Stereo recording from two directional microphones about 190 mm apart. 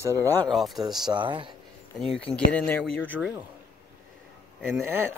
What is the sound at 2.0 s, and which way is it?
Speech, 5° left (ahead or behind).